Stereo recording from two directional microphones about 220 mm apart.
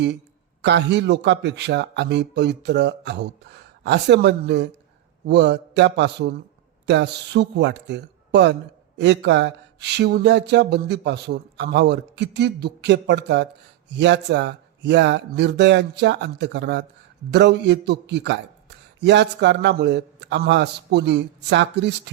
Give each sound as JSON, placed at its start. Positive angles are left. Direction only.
{"t": 0.6, "sound": "speech", "side_deg": -50}